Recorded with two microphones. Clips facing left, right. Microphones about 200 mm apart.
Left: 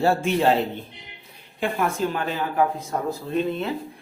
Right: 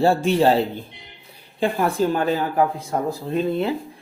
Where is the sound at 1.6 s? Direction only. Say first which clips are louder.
Right 4 dB; 35° right (ahead or behind).